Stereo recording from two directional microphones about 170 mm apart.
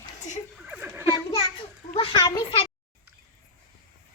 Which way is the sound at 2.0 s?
30° left (ahead or behind).